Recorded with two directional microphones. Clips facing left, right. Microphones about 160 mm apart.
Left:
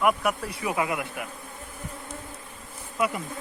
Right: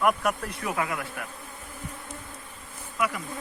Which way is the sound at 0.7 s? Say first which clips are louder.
Left 3 dB; 15° left (ahead or behind).